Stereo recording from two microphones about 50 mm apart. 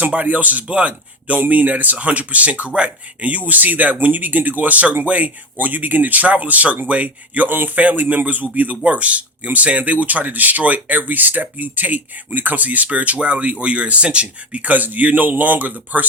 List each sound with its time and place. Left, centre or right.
0.0 s speech: right